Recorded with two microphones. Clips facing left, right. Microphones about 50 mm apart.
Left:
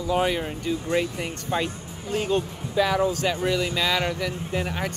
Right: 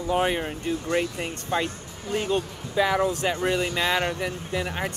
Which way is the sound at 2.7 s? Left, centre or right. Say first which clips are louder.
Even; right.